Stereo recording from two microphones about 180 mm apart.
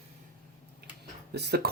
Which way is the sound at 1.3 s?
65° right (ahead or behind).